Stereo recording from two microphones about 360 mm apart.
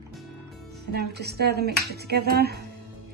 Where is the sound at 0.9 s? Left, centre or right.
Right.